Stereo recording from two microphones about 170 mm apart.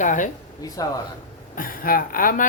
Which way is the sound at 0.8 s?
20° left (ahead or behind).